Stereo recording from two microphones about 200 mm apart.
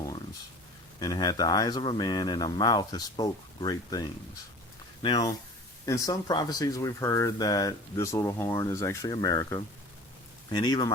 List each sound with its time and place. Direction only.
0.9 s speech: 20° left (ahead or behind)